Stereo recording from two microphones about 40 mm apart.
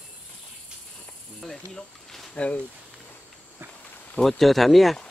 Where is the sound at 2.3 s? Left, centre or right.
Left.